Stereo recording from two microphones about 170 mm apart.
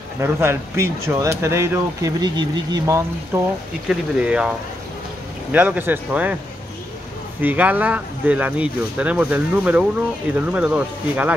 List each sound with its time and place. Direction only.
0.2 s speech: 15° right (ahead or behind)
3.3 s speech: 15° right (ahead or behind)
5.5 s speech: 10° right (ahead or behind)
7.4 s speech: 10° right (ahead or behind)